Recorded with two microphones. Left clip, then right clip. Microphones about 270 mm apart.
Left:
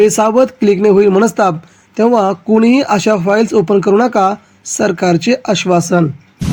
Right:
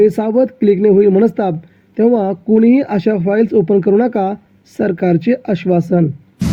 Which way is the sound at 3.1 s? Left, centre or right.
Left.